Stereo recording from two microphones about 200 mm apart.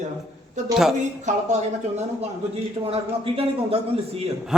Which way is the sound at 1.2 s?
35° right (ahead or behind).